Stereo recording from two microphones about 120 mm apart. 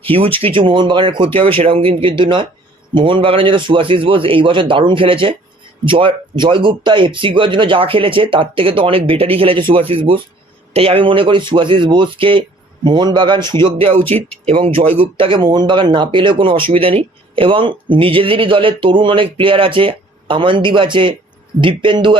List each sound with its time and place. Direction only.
0.0 s speech: 50° right (ahead or behind)